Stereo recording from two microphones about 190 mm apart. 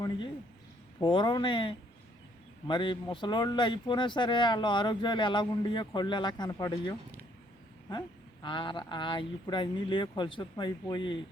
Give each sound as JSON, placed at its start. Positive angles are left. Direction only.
{"t": 1.0, "sound": "speech", "side_deg": 25}